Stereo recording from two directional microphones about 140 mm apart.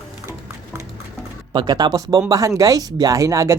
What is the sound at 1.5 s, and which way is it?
Speech, 30° right (ahead or behind).